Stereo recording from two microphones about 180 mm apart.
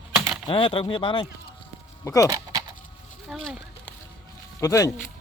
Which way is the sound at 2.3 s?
20° right (ahead or behind).